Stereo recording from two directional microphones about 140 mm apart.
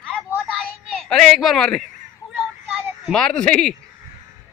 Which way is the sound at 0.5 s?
Centre (ahead or behind).